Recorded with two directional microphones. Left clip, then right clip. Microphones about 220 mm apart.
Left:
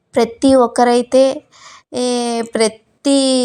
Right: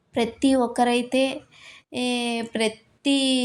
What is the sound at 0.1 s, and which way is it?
A woman's voice, 30° left (ahead or behind).